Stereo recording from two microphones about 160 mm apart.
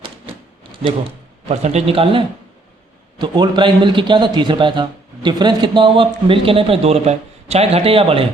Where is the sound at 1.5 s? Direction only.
45° right (ahead or behind).